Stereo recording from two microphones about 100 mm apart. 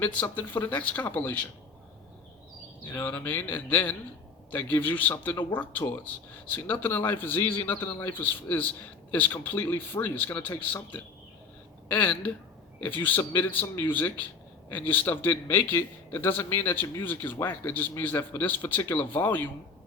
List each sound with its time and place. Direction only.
0.0 s speech: 15° left (ahead or behind)
2.9 s speech: 20° left (ahead or behind)
6.5 s a man's voice: 15° left (ahead or behind)